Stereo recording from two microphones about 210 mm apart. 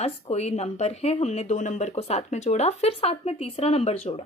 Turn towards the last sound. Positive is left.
turn(degrees=30)  # may be behind; listen again after turning